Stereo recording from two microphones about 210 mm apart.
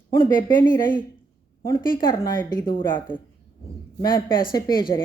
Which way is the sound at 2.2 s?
15° left (ahead or behind).